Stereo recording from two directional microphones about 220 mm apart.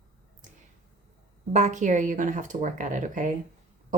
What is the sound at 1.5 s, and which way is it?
Speech, 30° right (ahead or behind).